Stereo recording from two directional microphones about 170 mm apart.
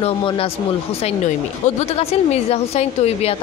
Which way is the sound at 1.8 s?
40° left (ahead or behind).